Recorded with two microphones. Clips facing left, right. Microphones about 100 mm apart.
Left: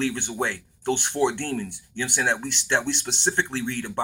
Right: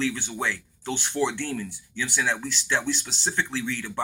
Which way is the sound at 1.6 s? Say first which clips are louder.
Left 2 dB; 60° left (ahead or behind).